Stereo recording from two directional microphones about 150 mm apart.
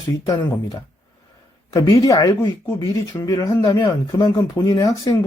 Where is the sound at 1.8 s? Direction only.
25° left (ahead or behind).